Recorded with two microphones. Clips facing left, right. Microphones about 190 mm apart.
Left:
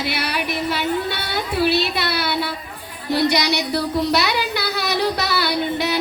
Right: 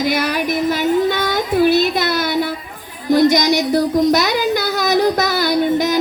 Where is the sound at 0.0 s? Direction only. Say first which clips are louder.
Right 6 dB; 45° right (ahead or behind).